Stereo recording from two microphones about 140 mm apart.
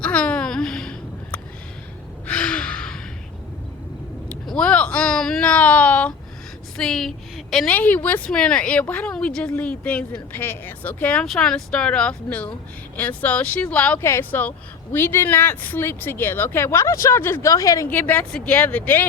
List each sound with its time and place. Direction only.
0.0 s a sound: 10° left (ahead or behind)
2.2 s gasp: 10° left (ahead or behind)
4.3 s a sound: 5° left (ahead or behind)
6.7 s a woman's voice: 5° left (ahead or behind)
7.7 s speech: 15° left (ahead or behind)
17.8 s speech: 10° left (ahead or behind)